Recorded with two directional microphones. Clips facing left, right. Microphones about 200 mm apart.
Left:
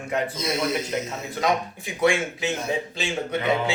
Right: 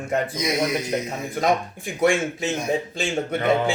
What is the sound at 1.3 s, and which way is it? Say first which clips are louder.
Speech: right 2 dB; 50° right (ahead or behind).